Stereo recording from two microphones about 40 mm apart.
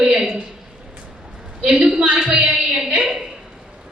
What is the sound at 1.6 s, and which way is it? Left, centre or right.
A woman's voice, right.